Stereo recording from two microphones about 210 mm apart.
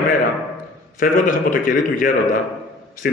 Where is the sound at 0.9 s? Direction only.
40° left (ahead or behind).